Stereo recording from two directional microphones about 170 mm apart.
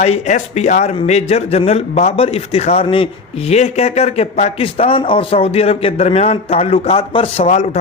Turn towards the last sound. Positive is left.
turn(degrees=40)  # may be behind; listen again after turning